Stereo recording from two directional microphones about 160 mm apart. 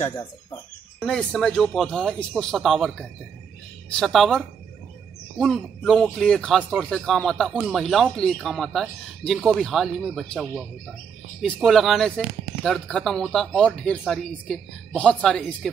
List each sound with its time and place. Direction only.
1.0 s speech: 5° left (ahead or behind)
11.4 s speech: centre (ahead or behind)